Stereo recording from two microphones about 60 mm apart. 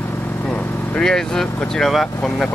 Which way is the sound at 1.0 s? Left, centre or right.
Centre.